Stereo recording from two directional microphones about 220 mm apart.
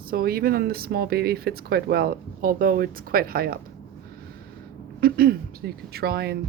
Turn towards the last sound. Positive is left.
turn(degrees=-45)  # may be behind; listen again after turning